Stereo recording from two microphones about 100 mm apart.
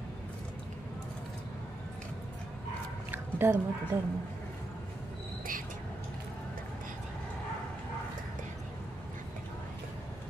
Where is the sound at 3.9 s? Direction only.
25° right (ahead or behind).